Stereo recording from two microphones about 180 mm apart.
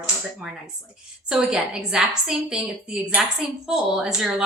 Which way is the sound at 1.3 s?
5° right (ahead or behind).